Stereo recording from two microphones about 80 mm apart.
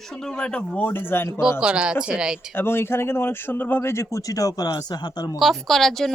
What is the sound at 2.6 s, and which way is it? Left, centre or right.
Speech, left.